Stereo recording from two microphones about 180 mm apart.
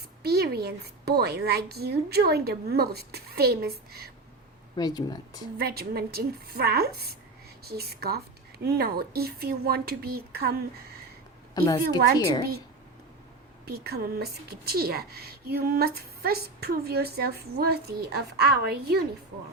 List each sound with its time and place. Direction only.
0.2 s a woman's voice: 60° right (ahead or behind)
4.8 s speech: 20° left (ahead or behind)
5.5 s a woman's voice: 60° right (ahead or behind)
11.5 s speech: 20° left (ahead or behind)
13.7 s a woman's voice: 60° right (ahead or behind)